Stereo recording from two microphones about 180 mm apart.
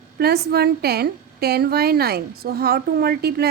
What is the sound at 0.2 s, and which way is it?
A woman's voice, 60° right (ahead or behind).